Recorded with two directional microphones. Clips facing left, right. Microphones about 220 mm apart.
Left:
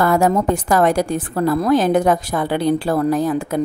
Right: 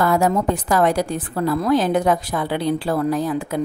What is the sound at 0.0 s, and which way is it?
A woman's voice, 50° left (ahead or behind).